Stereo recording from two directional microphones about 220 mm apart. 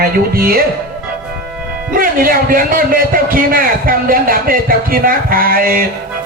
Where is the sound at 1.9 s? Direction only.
40° right (ahead or behind).